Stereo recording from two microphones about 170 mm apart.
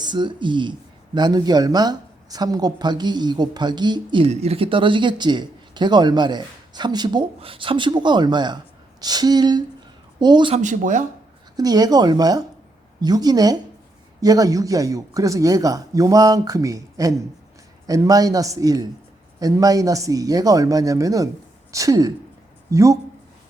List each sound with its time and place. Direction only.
0.0 s speech: 25° right (ahead or behind)
10.6 s speech: 45° right (ahead or behind)
11.5 s speech: 20° right (ahead or behind)